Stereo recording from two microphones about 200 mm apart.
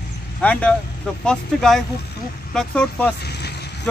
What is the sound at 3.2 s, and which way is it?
Vehicle, 55° left (ahead or behind).